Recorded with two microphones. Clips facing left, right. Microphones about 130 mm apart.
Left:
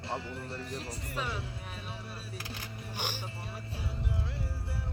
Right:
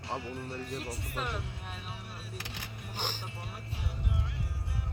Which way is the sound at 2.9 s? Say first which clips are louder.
Even; 10° left (ahead or behind).